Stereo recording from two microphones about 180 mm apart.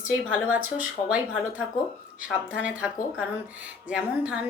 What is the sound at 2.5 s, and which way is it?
Speech, 5° right (ahead or behind).